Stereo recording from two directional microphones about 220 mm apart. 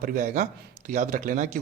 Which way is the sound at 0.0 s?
40° right (ahead or behind).